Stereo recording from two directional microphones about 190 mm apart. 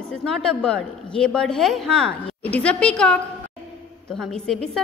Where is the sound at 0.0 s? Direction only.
Centre (ahead or behind).